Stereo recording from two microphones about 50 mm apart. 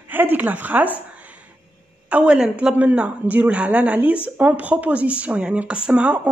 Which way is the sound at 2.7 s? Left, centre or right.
Right.